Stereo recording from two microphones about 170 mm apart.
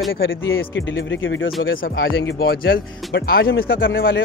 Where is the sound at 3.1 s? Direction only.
75° left (ahead or behind).